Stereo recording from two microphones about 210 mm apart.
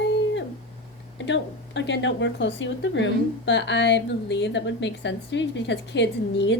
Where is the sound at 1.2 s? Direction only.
60° left (ahead or behind).